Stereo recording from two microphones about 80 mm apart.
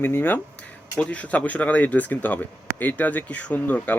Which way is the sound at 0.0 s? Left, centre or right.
Left.